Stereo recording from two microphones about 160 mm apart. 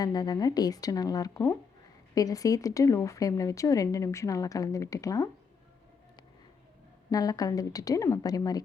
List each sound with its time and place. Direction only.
0.0 s speech: 25° left (ahead or behind)
7.1 s speech: 25° left (ahead or behind)